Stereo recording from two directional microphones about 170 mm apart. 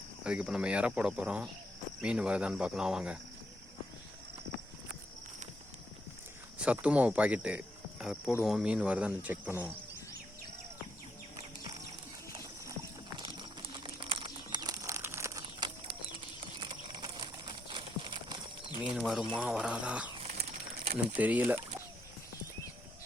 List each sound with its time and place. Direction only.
0.3 s speech: 5° right (ahead or behind)
6.6 s speech: 5° right (ahead or behind)
13.1 s a sound: 25° right (ahead or behind)
16.6 s horse: 30° right (ahead or behind)
18.8 s speech: 5° right (ahead or behind)
21.2 s speech: 10° right (ahead or behind)